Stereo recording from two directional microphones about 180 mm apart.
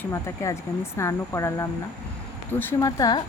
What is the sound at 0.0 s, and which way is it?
Speech, 15° left (ahead or behind).